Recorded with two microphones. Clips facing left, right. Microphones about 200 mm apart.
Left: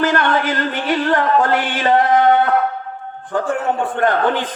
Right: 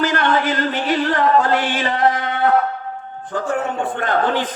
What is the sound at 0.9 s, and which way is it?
Music, 50° left (ahead or behind).